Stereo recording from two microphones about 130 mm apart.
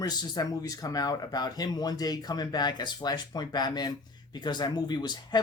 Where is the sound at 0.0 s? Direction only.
30° left (ahead or behind).